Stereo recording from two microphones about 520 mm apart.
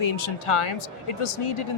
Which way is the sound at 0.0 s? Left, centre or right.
Left.